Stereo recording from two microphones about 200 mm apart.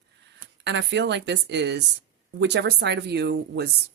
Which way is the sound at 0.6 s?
60° right (ahead or behind).